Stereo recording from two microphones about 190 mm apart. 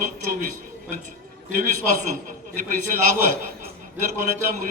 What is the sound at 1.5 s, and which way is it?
A man's voice, 40° right (ahead or behind).